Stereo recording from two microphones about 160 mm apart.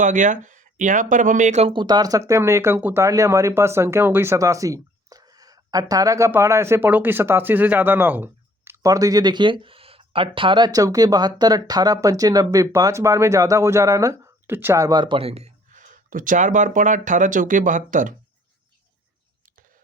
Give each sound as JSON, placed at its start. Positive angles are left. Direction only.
{"t": 0.0, "sound": "speech", "side_deg": -55}
{"t": 1.7, "sound": "speech", "side_deg": -25}